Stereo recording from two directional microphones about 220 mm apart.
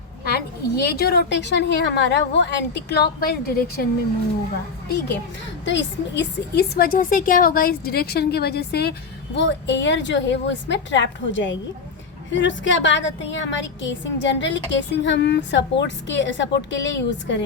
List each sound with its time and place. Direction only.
0.3 s a woman's voice: 45° left (ahead or behind)
5.6 s a woman's voice: 55° left (ahead or behind)